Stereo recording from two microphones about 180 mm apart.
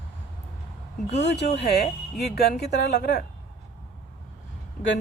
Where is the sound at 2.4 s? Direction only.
65° left (ahead or behind).